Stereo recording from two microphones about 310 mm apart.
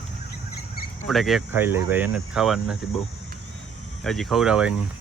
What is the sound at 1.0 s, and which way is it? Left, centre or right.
Speech, centre.